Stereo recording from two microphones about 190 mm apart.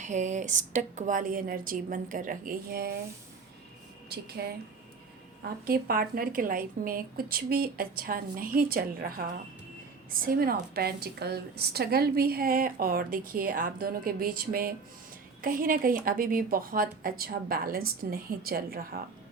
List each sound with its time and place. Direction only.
0.0 s a woman's voice: 40° right (ahead or behind)
4.1 s speech: 60° right (ahead or behind)
5.6 s a woman's voice: 50° right (ahead or behind)